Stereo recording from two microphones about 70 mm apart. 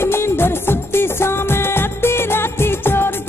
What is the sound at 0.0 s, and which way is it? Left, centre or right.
Music, left.